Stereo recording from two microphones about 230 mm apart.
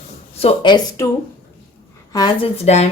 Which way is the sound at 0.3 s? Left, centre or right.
Left.